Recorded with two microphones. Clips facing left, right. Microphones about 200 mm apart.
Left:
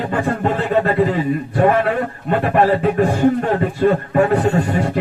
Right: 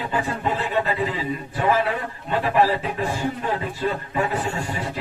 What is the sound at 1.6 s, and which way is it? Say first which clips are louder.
A man's voice: left 6 dB; 60° left (ahead or behind).